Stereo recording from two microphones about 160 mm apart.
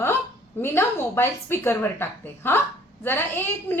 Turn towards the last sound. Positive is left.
turn(degrees=15)  # may be behind; listen again after turning